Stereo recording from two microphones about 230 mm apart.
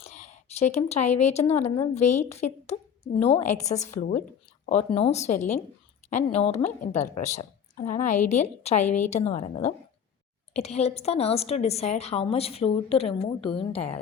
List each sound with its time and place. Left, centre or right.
0.0 s a woman's voice: left